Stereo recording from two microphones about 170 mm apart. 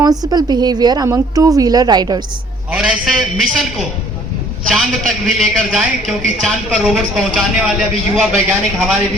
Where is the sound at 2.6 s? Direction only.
5° right (ahead or behind).